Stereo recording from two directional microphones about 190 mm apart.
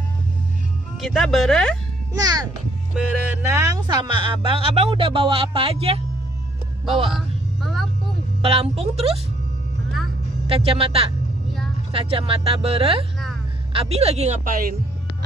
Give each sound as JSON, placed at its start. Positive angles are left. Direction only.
{"t": 1.0, "sound": "speech", "side_deg": 0}
{"t": 2.1, "sound": "speech", "side_deg": -20}
{"t": 3.4, "sound": "speech", "side_deg": -20}
{"t": 7.1, "sound": "a sound", "side_deg": 0}
{"t": 8.4, "sound": "a woman's voice", "side_deg": -30}
{"t": 10.5, "sound": "a woman's voice", "side_deg": -30}